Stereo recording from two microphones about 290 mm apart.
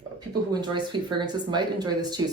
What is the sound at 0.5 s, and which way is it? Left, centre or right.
Speech, centre.